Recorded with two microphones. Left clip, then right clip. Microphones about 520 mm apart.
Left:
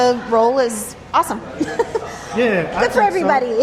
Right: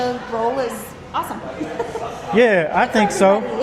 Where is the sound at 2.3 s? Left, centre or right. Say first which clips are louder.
Right 3 dB; right.